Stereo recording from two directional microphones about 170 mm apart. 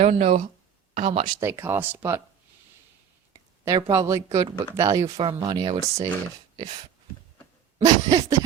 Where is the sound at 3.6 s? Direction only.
20° right (ahead or behind).